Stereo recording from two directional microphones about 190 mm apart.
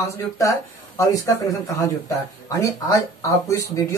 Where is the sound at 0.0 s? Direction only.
15° left (ahead or behind).